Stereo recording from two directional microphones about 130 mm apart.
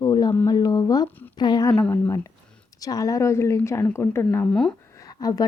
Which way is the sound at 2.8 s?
25° left (ahead or behind).